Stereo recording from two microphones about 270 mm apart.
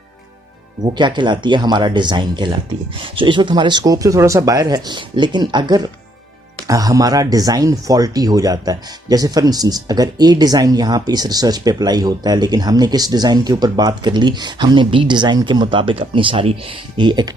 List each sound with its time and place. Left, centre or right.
0.9 s speech: centre